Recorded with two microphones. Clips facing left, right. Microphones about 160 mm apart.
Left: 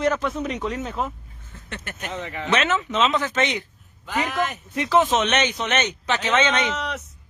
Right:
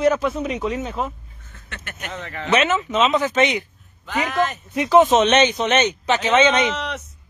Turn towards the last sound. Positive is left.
turn(degrees=0)  # may be behind; listen again after turning